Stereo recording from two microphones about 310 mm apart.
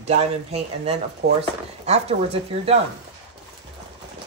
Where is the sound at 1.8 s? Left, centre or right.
Centre.